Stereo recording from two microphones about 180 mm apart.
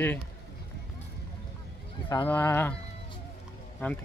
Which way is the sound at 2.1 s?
15° left (ahead or behind).